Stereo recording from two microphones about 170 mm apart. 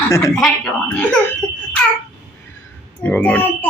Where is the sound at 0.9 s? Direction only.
15° left (ahead or behind).